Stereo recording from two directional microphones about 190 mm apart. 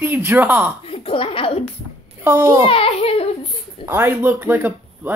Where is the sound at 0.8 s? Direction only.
30° left (ahead or behind).